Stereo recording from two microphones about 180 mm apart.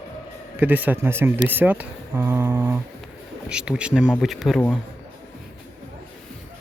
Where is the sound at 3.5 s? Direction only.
5° right (ahead or behind).